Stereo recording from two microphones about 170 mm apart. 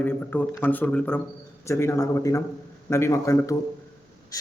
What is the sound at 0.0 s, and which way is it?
A man's voice, 10° left (ahead or behind).